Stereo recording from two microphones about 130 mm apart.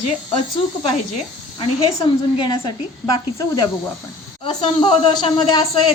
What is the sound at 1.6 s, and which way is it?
Speech, 35° left (ahead or behind).